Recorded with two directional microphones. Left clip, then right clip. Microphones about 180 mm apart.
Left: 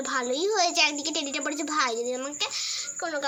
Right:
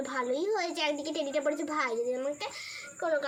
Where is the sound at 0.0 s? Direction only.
40° left (ahead or behind).